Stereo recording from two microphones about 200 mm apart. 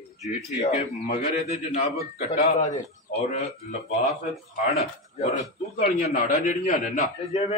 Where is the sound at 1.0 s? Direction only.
30° left (ahead or behind).